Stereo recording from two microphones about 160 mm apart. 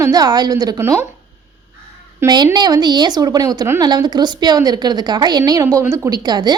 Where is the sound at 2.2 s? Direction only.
25° right (ahead or behind).